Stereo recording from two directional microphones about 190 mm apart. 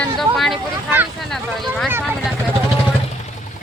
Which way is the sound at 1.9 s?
10° right (ahead or behind).